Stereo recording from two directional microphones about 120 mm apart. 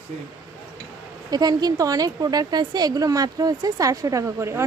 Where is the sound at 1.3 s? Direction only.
35° right (ahead or behind).